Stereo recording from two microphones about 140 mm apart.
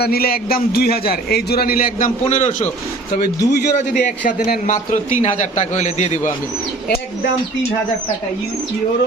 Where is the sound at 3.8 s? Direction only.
65° left (ahead or behind).